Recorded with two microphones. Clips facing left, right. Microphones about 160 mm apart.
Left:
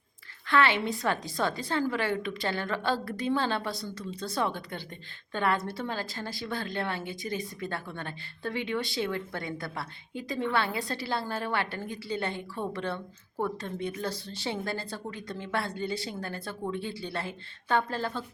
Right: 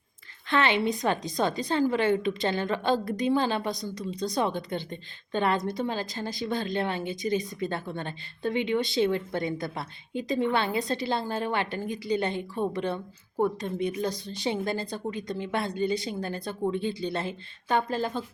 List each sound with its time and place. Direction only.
0.4 s a woman's voice: 20° right (ahead or behind)